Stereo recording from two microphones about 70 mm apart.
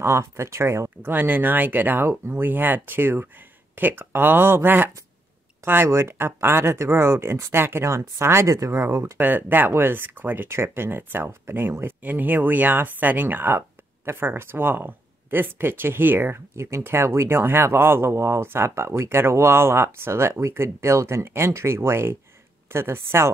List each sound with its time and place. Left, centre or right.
0.0 s speech: right
9.2 s speech: right